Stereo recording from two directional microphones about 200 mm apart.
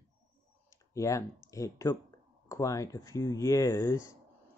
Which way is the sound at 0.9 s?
15° left (ahead or behind).